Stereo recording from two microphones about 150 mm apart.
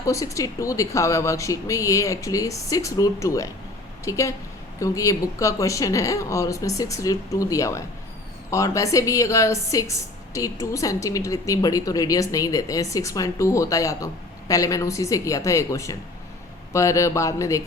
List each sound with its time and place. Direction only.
0.0 s a woman's voice: 20° left (ahead or behind)